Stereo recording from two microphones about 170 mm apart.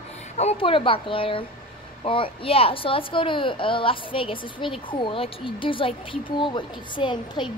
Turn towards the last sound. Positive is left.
turn(degrees=30)  # may be behind; listen again after turning